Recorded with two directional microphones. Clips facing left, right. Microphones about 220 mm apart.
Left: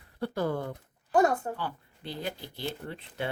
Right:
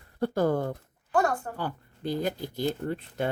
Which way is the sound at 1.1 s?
20° left (ahead or behind).